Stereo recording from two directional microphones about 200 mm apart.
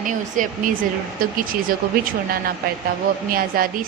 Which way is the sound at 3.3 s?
45° right (ahead or behind).